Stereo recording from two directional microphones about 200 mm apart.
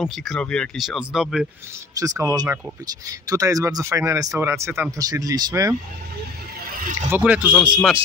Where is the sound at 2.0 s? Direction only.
20° right (ahead or behind).